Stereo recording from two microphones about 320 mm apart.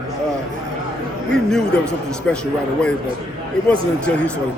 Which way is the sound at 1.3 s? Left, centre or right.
Centre.